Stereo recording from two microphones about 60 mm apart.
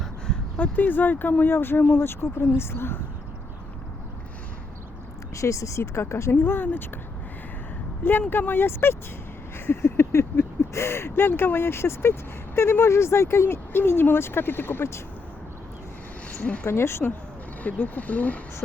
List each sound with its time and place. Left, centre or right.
0.5 s speech: left
5.3 s speech: left
6.3 s speech: left
8.3 s speech: left
16.6 s speech: left
17.6 s speech: left